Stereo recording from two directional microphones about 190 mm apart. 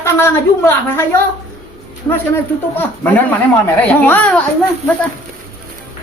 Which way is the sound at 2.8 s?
10° left (ahead or behind).